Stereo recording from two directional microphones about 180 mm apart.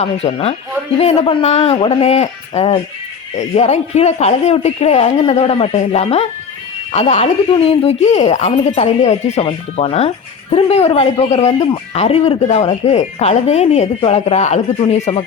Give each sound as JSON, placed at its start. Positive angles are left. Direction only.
{"t": 0.0, "sound": "speech", "side_deg": 35}